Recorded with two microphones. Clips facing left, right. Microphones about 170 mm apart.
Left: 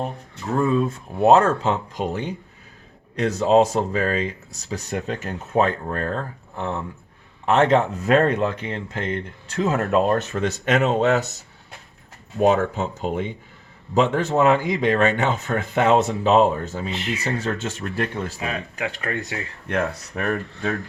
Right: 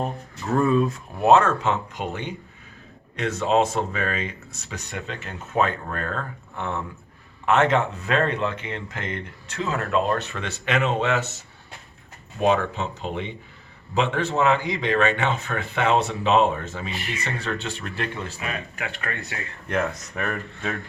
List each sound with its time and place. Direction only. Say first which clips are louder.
0.4 s speech: even; 20° left (ahead or behind); by 11.3 s 40° left (ahead or behind)
12.4 s speech: left 3 dB; 45° left (ahead or behind)
18.9 s speech: left 6 dB; 30° left (ahead or behind)